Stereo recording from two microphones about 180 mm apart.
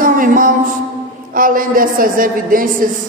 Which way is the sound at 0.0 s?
50° right (ahead or behind).